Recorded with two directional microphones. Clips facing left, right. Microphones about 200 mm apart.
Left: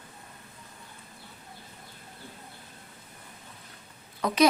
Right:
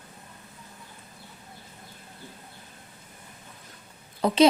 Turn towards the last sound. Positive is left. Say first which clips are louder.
# right 4 dB
turn(degrees=-30)  # may be behind; listen again after turning